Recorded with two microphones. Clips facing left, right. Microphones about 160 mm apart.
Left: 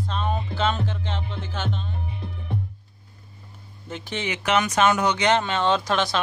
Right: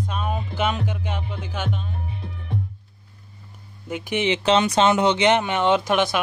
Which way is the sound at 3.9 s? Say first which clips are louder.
Right 7 dB; 15° right (ahead or behind).